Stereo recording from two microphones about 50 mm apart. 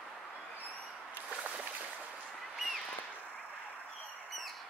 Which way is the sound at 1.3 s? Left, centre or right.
Right.